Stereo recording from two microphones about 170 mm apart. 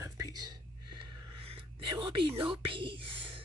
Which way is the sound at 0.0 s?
20° right (ahead or behind).